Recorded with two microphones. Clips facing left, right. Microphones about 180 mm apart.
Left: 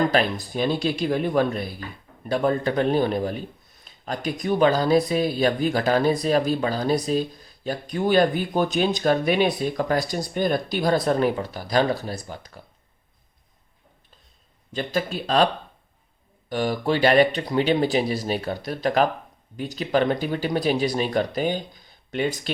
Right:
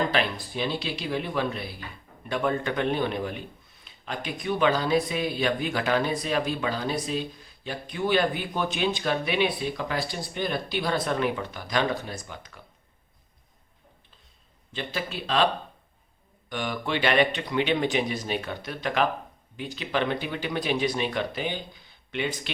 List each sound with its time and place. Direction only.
0.1 s speech: 45° left (ahead or behind)
14.7 s speech: 45° left (ahead or behind)
16.5 s speech: 35° left (ahead or behind)